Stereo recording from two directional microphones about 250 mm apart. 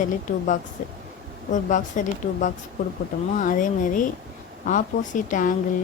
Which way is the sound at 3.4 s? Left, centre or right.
Left.